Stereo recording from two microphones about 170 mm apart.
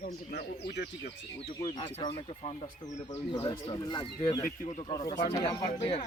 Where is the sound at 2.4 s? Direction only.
35° left (ahead or behind).